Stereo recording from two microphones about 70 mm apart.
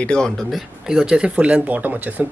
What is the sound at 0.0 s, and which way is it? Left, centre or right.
Speech, centre.